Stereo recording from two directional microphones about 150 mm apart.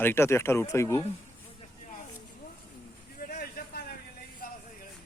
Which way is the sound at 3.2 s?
85° left.